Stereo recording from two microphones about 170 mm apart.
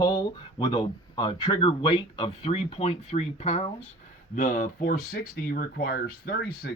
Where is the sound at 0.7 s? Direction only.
25° left (ahead or behind).